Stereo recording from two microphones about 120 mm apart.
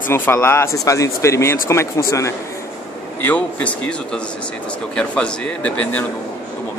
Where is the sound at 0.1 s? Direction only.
20° left (ahead or behind).